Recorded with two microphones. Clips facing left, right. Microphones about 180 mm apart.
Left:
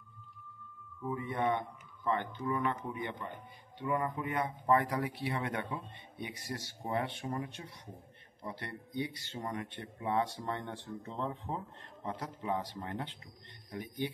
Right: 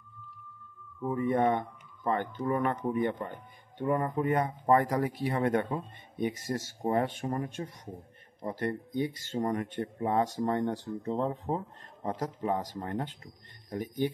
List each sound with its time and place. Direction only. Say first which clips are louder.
1.0 s speech: right 7 dB; 45° right (ahead or behind)